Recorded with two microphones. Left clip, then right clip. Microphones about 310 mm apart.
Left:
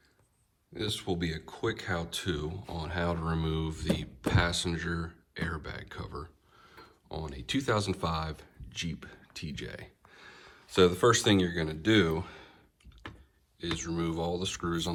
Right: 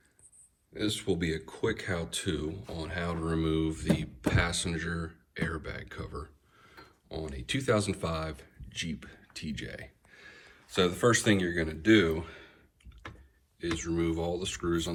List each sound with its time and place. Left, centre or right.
0.7 s speech: centre
10.5 s speech: centre
13.6 s speech: centre